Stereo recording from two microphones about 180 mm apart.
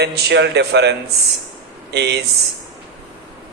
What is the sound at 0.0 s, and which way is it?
A man's voice, 65° right (ahead or behind).